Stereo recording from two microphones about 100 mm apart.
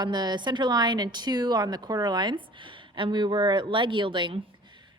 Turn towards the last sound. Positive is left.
turn(degrees=-55)  # may be behind; listen again after turning